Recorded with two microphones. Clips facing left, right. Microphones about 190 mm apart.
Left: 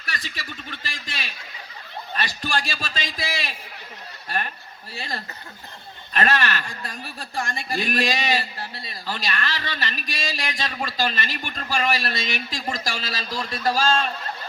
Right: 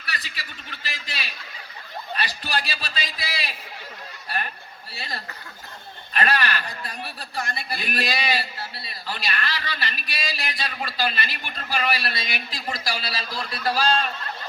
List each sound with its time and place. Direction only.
0.0 s a sound: 45° left (ahead or behind)
0.8 s a man's voice: 45° left (ahead or behind)
4.9 s a man's voice: 40° left (ahead or behind)